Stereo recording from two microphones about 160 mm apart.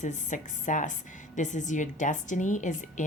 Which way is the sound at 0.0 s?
50° left (ahead or behind).